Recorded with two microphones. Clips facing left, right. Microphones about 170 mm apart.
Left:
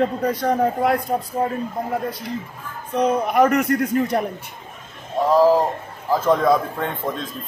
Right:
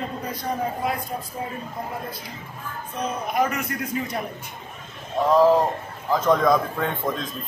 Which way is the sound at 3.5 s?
50° left (ahead or behind).